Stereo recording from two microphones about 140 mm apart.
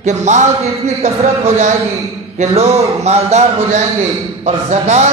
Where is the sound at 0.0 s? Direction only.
55° right (ahead or behind).